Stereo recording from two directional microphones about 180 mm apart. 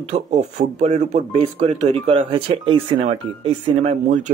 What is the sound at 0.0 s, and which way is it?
Speech, 40° right (ahead or behind).